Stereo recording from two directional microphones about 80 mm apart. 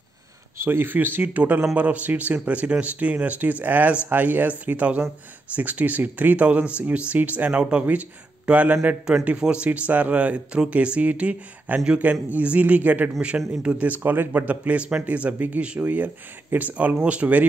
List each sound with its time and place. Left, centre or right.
0.6 s speech: right